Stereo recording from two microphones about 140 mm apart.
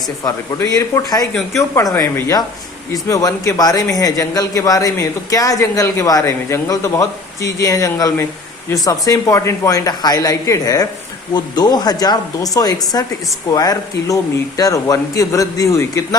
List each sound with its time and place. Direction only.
0.3 s a man's voice: 25° left (ahead or behind)